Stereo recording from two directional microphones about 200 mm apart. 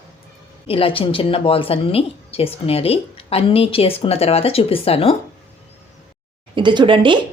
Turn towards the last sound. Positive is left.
turn(degrees=-25)  # may be behind; listen again after turning